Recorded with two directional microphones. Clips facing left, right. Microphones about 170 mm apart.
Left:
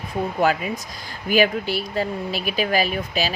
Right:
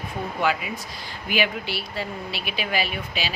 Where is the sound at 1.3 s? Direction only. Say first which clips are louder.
Left 6 dB; 45° left (ahead or behind).